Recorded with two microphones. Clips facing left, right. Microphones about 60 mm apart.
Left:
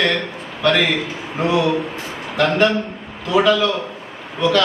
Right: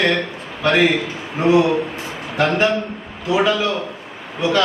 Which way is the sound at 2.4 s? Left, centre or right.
Centre.